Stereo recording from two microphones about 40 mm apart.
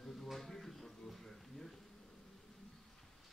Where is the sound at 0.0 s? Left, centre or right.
Centre.